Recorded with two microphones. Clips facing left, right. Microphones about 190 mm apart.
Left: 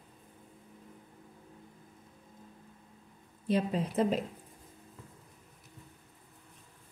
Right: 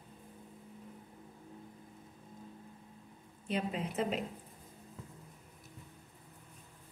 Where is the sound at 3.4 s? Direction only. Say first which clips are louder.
Left 6 dB; 35° left (ahead or behind).